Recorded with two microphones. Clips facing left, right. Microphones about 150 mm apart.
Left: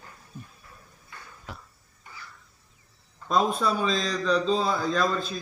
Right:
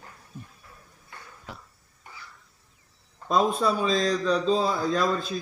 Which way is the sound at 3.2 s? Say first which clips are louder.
Right 1 dB; centre (ahead or behind).